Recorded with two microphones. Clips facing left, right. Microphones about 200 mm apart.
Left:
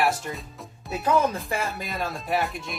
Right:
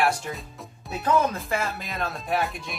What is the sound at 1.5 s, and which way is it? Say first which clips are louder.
Speech: even; 15° left (ahead or behind).